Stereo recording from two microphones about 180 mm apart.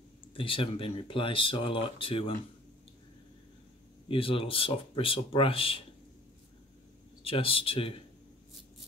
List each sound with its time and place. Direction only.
0.3 s speech: 30° left (ahead or behind)
4.1 s speech: 30° left (ahead or behind)
7.2 s speech: 30° left (ahead or behind)